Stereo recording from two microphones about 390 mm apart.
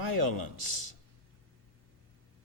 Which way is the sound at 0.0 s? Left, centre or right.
Right.